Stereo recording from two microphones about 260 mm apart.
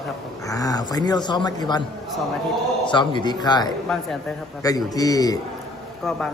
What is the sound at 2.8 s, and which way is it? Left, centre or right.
Speech, centre.